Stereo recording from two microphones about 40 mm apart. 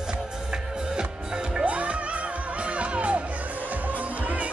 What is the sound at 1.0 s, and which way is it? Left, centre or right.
Music, centre.